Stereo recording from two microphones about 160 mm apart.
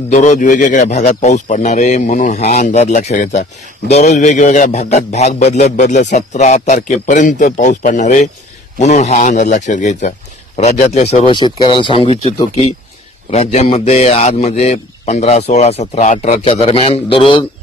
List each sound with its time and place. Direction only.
0.1 s a man's voice: 50° left (ahead or behind)
11.3 s a man's voice: 30° left (ahead or behind)